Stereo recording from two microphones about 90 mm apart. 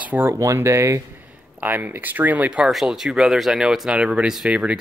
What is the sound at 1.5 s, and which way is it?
Speech, 20° right (ahead or behind).